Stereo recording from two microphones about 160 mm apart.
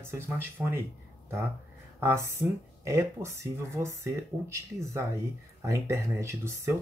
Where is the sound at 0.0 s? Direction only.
15° right (ahead or behind).